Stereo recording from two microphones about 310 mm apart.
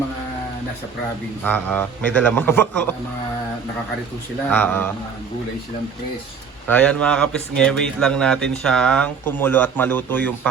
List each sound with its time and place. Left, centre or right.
1.5 s speech: centre
4.4 s speech: centre
6.7 s speech: centre